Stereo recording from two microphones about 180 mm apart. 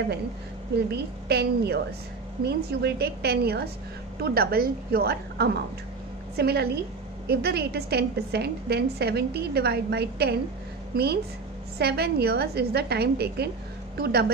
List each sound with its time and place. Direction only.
0.9 s a woman's voice: 65° right (ahead or behind)